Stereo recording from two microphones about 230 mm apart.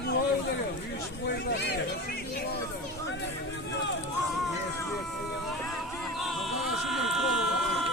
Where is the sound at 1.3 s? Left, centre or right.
Left.